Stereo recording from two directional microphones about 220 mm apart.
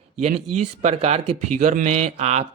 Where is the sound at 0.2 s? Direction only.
30° right (ahead or behind).